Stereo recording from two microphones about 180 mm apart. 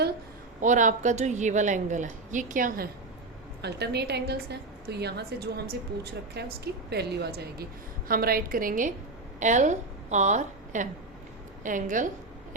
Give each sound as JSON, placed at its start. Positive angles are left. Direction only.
{"t": 0.6, "sound": "a woman's voice", "side_deg": -45}
{"t": 3.6, "sound": "a woman's voice", "side_deg": -65}